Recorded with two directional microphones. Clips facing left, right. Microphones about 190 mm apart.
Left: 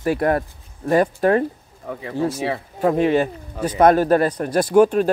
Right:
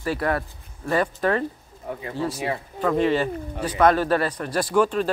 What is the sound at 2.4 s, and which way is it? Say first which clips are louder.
Speech: left 4 dB; 45° left (ahead or behind).